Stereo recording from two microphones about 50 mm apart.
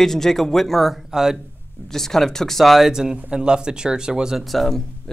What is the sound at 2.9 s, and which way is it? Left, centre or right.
Speech, centre.